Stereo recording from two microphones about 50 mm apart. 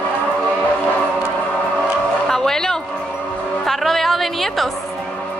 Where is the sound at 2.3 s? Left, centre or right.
Centre.